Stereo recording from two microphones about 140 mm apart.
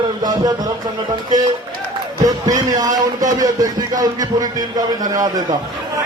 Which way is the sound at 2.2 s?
25° right (ahead or behind).